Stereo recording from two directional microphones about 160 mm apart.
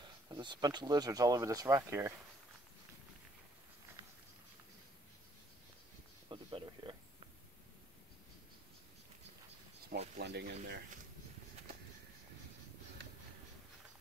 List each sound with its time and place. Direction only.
0.0 s speech: 30° right (ahead or behind)
6.2 s a sound: 30° right (ahead or behind)
10.1 s speech: 90° right